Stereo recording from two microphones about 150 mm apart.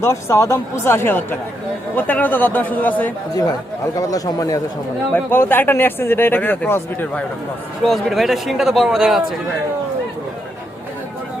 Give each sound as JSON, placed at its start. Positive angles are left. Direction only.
{"t": 0.0, "sound": "speech", "side_deg": 20}
{"t": 3.9, "sound": "speech", "side_deg": 25}
{"t": 7.9, "sound": "speech", "side_deg": 0}